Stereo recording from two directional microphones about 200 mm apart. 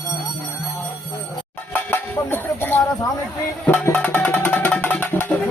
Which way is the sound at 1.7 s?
10° left (ahead or behind).